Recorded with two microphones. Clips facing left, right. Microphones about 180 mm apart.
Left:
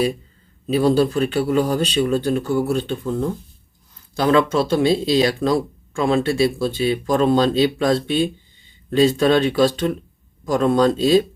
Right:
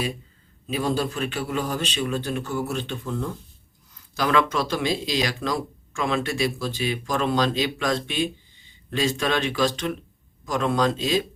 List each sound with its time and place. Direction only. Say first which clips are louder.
0.7 s a man's voice: left 9 dB; 35° left (ahead or behind)